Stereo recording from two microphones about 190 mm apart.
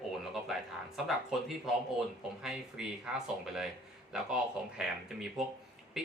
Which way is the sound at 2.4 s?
Centre (ahead or behind).